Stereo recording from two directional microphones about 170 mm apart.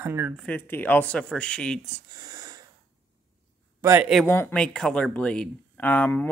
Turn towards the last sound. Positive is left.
turn(degrees=10)  # may be behind; listen again after turning